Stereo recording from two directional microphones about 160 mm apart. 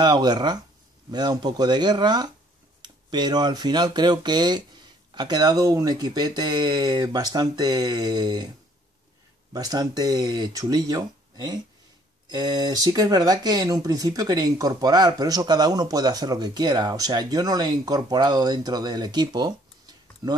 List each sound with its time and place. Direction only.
0.0 s speech: 25° right (ahead or behind)
9.5 s speech: 25° right (ahead or behind)